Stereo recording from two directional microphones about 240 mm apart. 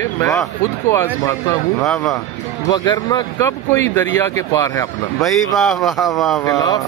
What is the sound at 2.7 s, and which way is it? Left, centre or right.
Speech, centre.